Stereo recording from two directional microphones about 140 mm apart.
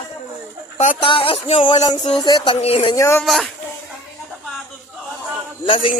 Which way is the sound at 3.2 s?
Centre (ahead or behind).